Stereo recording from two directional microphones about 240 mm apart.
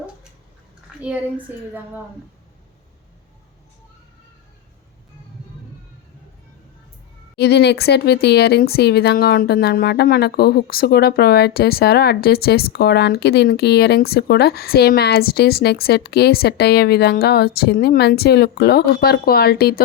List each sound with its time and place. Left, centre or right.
1.5 s a woman's voice: centre
7.3 s speech: left